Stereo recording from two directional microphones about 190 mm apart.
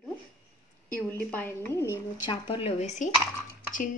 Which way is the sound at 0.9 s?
10° left (ahead or behind).